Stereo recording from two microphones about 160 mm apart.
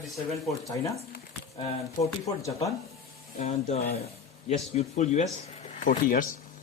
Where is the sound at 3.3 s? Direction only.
45° left (ahead or behind).